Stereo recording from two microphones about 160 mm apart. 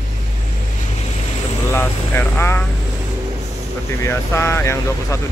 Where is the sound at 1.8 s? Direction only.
15° left (ahead or behind).